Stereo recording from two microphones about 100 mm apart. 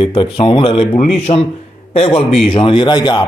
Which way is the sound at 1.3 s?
90° left.